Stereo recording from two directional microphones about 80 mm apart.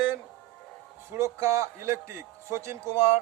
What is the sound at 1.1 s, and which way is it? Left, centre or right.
A man's voice, right.